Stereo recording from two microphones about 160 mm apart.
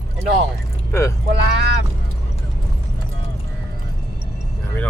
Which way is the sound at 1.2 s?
85° right.